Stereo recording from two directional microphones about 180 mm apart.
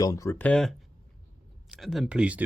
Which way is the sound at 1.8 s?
Centre (ahead or behind).